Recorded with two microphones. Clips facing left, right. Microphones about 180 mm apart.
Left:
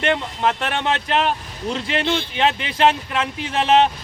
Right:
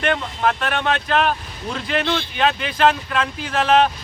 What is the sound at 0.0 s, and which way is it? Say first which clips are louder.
Speech: even; 25° left (ahead or behind).